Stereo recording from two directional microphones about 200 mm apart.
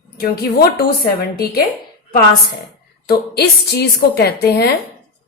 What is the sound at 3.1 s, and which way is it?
A woman's voice, 55° left (ahead or behind).